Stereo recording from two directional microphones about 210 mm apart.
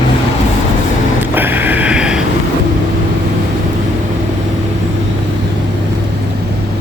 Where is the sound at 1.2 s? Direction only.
10° right (ahead or behind).